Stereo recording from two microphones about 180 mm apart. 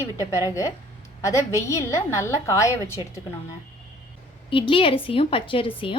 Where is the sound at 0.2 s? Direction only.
15° left (ahead or behind).